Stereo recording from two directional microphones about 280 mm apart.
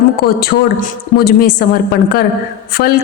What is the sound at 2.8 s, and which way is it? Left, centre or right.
Speech, left.